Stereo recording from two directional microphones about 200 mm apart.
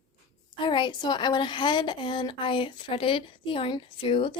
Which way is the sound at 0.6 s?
25° left (ahead or behind).